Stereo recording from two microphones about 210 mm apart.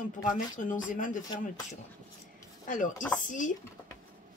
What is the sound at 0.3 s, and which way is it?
Speech, 40° left (ahead or behind).